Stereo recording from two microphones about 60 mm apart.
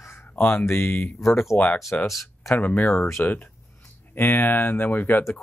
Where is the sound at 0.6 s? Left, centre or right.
Left.